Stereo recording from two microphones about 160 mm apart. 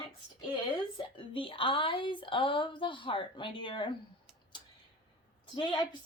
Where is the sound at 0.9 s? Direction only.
30° left (ahead or behind).